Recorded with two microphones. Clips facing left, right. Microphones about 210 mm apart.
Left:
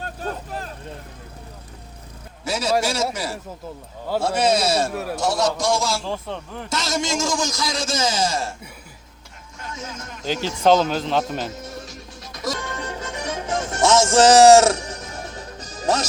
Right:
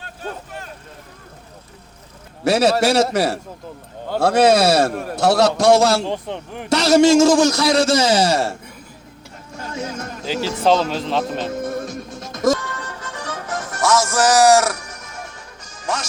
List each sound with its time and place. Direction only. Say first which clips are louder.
0.0 s vehicle: left 2 dB; 40° left (ahead or behind)
2.4 s a man's voice: right 6 dB; 65° right (ahead or behind)
6.1 s speech: right 3 dB; 15° right (ahead or behind)
6.7 s a man's voice: right 13 dB; 70° right (ahead or behind)
9.6 s music: right 7 dB; 65° right (ahead or behind)
10.6 s speech: left 1 dB; centre (ahead or behind)
11.5 s music: right 10 dB; 55° right (ahead or behind)
12.5 s music: left 2 dB; 25° left (ahead or behind); by 16.0 s 40° left (ahead or behind)